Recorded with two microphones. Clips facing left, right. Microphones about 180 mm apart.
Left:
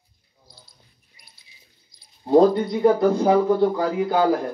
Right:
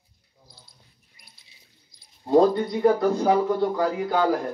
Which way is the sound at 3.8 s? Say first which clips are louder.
Left 2 dB; 25° left (ahead or behind).